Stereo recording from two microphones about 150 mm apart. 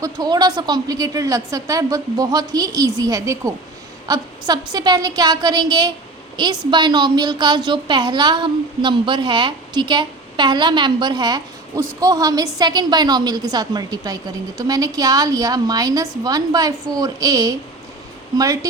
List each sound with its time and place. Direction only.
0.0 s a woman's voice: 25° right (ahead or behind)